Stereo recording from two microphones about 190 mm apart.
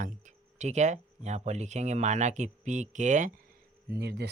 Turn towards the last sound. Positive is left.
turn(degrees=-60)  # may be behind; listen again after turning